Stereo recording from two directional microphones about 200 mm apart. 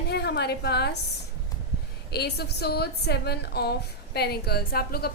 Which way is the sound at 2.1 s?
55° left (ahead or behind).